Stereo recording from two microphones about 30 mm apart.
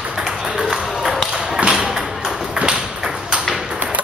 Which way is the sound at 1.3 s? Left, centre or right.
Right.